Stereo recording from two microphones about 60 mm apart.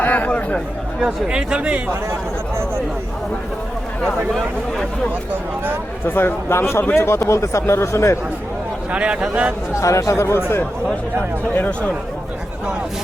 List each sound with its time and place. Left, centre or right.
0.0 s speech: left
1.0 s speech: centre
6.1 s a man's voice: left
8.9 s a man's voice: centre
9.8 s speech: left